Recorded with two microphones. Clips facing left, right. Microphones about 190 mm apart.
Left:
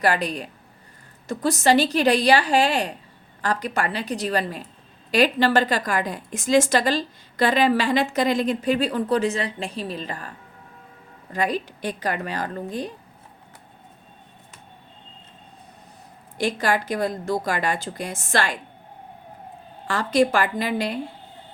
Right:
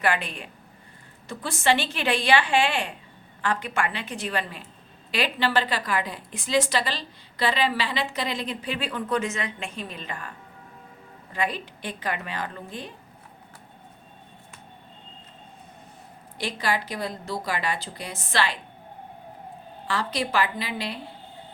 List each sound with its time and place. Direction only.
0.0 s a woman's voice: 40° left (ahead or behind)
16.4 s a woman's voice: 45° left (ahead or behind)
19.9 s a woman's voice: 50° left (ahead or behind)